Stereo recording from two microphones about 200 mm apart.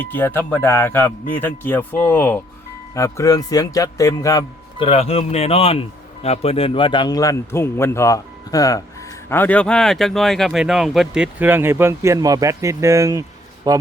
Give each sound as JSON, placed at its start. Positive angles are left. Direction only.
{"t": 0.0, "sound": "speech", "side_deg": 10}
{"t": 4.9, "sound": "a man's voice", "side_deg": 30}